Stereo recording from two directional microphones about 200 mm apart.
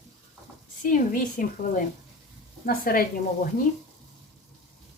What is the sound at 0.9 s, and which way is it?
Speech, 40° left (ahead or behind).